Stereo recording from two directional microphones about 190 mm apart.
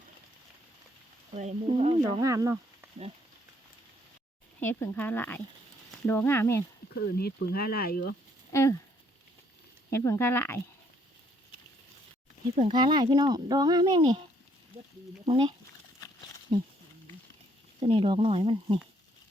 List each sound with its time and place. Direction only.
1.3 s speech: 35° right (ahead or behind)
2.2 s speech: 15° right (ahead or behind)
4.6 s speech: 10° left (ahead or behind)
6.9 s speech: 60° left (ahead or behind)
8.5 s speech: 15° left (ahead or behind)
9.9 s speech: 15° left (ahead or behind)
12.5 s speech: 25° right (ahead or behind)
15.3 s speech: 25° right (ahead or behind)
17.7 s speech: 30° right (ahead or behind)